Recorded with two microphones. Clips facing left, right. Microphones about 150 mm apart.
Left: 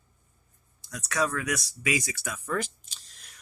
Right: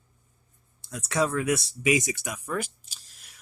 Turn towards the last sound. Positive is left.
turn(degrees=-5)  # may be behind; listen again after turning